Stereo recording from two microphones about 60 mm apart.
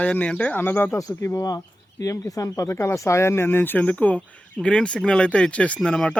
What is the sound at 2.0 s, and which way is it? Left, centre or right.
Speech, left.